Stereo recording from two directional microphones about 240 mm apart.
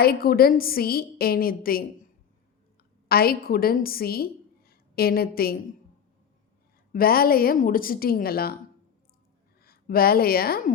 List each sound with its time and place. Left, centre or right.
0.0 s a woman's voice: left
3.1 s a woman's voice: left
6.9 s a woman's voice: left
9.6 s speech: left